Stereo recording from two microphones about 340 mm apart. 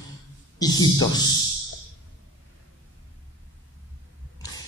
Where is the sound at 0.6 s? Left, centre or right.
Centre.